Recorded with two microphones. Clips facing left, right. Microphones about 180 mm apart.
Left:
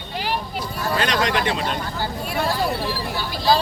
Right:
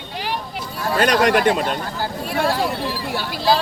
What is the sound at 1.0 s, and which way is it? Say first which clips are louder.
Speech: right 7 dB; 55° right (ahead or behind).